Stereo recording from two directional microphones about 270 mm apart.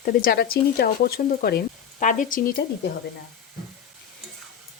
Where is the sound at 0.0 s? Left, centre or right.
Left.